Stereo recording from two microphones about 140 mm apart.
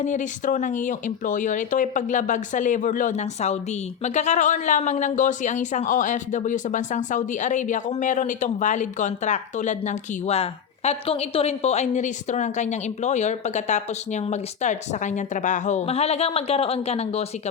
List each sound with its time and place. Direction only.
0.0 s speech: 60° left (ahead or behind)